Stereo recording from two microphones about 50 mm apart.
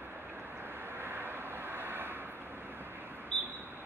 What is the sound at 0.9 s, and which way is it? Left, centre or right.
Vehicle, right.